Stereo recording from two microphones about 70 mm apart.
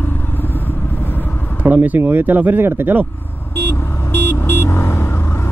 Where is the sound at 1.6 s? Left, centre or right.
Right.